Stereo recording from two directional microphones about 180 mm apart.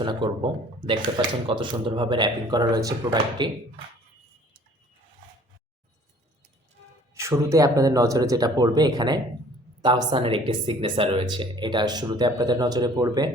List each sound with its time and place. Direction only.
0.0 s speech: 25° right (ahead or behind)
7.1 s speech: 15° right (ahead or behind)